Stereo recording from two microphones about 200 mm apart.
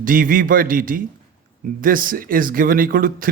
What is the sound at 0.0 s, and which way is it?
A man's voice, 45° right (ahead or behind).